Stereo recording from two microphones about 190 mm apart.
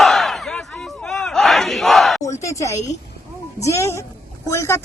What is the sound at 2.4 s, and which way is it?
Speech, 15° left (ahead or behind).